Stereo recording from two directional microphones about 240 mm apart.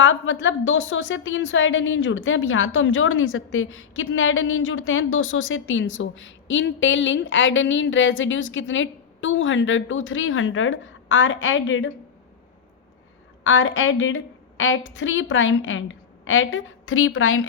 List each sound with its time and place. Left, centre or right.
0.0 s a woman's voice: left
13.4 s a woman's voice: left